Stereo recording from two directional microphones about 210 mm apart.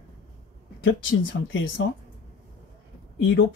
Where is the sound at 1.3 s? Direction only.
60° left (ahead or behind).